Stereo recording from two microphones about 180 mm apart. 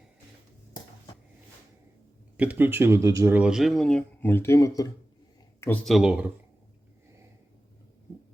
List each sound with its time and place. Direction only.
2.4 s speech: 10° right (ahead or behind)